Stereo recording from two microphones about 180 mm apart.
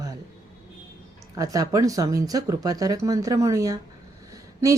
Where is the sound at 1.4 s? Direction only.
20° right (ahead or behind).